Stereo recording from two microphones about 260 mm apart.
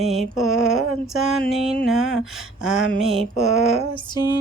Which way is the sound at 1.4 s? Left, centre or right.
Centre.